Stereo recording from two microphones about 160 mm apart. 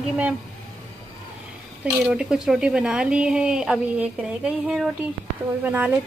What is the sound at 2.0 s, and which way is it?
A woman's voice, 5° right (ahead or behind).